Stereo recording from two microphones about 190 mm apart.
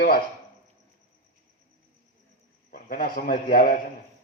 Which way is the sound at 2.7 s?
50° left (ahead or behind).